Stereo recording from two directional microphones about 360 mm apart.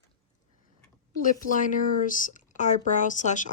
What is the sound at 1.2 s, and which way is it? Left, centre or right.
Speech, left.